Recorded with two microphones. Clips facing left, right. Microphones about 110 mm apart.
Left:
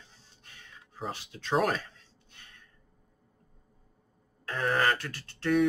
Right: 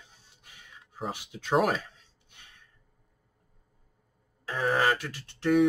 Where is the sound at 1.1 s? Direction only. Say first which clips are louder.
Right 1 dB; 15° right (ahead or behind).